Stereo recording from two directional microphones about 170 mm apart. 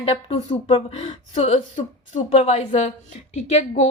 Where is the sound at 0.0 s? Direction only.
35° left (ahead or behind).